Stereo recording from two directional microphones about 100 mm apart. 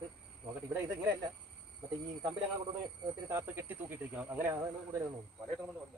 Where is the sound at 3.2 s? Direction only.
25° right (ahead or behind).